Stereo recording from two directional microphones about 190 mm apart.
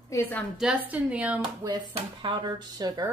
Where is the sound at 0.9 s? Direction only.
5° right (ahead or behind).